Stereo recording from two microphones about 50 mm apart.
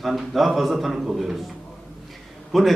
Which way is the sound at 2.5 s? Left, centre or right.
Centre.